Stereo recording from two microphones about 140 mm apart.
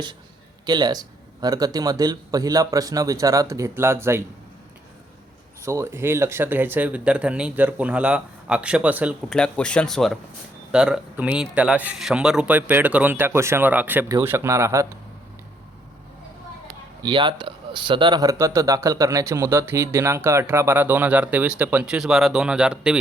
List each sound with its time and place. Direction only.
0.6 s speech: 30° right (ahead or behind)
5.6 s speech: 20° right (ahead or behind)
9.3 s speech: 5° left (ahead or behind); by 14.8 s 20° right (ahead or behind)
17.0 s speech: 35° right (ahead or behind); by 23.0 s 5° right (ahead or behind)